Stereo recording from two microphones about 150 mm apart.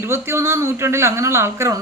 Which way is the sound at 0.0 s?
15° right (ahead or behind).